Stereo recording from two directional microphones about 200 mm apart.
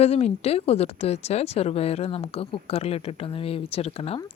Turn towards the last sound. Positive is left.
turn(degrees=30)  # may be behind; listen again after turning